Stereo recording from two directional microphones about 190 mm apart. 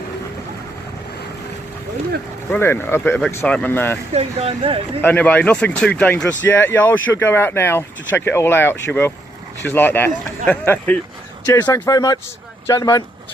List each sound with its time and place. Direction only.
2.5 s speech: 10° left (ahead or behind)
4.1 s speech: 30° right (ahead or behind)
5.0 s speech: 10° left (ahead or behind)